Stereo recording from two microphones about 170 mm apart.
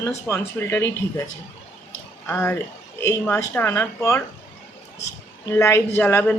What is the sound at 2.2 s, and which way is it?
Speech, 15° left (ahead or behind).